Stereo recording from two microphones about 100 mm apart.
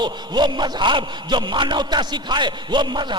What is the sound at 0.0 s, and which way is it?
A man's voice, 50° right (ahead or behind).